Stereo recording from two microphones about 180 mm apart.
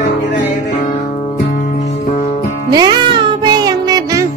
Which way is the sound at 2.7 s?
25° right (ahead or behind).